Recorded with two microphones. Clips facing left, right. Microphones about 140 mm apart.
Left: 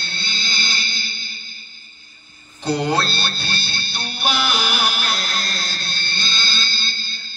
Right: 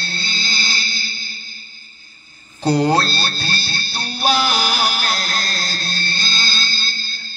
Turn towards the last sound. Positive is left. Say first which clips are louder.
# right 2 dB
turn(degrees=-40)  # may be behind; listen again after turning